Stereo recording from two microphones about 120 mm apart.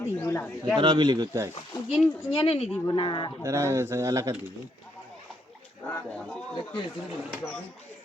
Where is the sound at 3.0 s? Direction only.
45° left (ahead or behind).